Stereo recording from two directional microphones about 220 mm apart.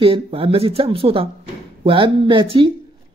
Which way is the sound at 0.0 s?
25° right (ahead or behind).